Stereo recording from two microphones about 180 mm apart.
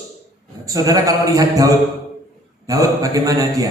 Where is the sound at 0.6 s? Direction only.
20° right (ahead or behind).